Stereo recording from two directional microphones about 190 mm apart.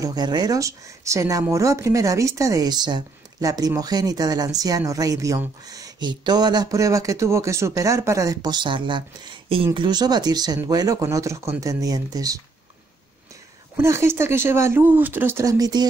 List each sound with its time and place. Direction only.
0.0 s speech: 20° right (ahead or behind)
13.7 s speech: 15° right (ahead or behind)